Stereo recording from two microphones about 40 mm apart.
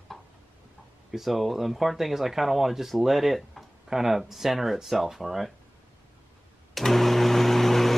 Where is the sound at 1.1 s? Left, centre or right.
Centre.